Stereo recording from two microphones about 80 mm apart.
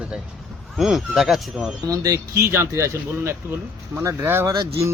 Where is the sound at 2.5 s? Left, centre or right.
Right.